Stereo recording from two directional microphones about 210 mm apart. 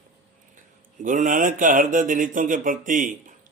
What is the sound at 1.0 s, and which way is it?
Speech, 40° right (ahead or behind).